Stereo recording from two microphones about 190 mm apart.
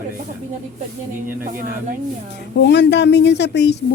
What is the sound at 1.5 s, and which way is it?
Speech, 45° right (ahead or behind).